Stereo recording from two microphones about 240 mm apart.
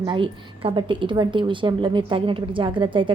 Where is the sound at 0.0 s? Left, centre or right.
Right.